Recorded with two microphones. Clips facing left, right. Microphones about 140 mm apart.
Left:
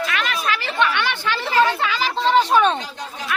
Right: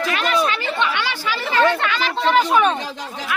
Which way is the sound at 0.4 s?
25° right (ahead or behind).